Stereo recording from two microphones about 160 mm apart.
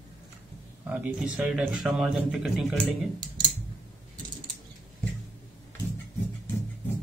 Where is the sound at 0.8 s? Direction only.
5° right (ahead or behind).